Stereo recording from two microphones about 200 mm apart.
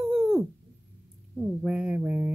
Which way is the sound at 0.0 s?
Centre (ahead or behind).